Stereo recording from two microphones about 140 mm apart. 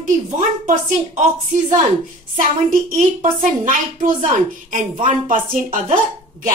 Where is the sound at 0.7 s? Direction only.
65° right (ahead or behind).